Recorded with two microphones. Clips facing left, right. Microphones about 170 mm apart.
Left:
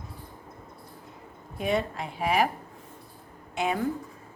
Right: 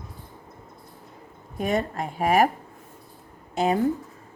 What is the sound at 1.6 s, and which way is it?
Speech, 45° right (ahead or behind).